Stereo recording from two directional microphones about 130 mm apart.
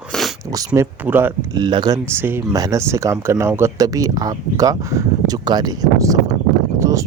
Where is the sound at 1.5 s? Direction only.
35° right (ahead or behind).